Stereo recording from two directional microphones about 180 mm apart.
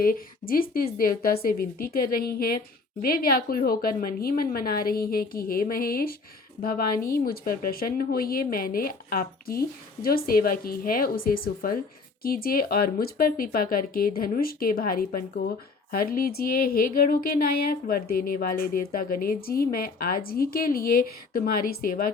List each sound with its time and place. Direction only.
0.0 s speech: 55° left (ahead or behind)